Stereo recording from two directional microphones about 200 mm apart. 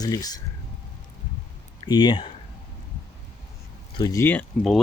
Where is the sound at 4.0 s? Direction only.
15° left (ahead or behind).